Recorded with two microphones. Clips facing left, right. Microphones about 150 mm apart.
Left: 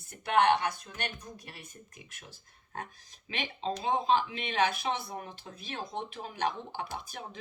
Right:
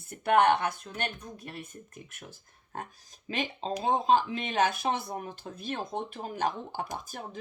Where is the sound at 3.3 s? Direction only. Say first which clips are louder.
Right 2 dB; 40° right (ahead or behind).